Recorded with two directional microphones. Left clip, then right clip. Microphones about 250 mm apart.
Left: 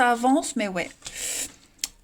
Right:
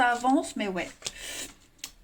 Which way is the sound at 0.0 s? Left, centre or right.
Left.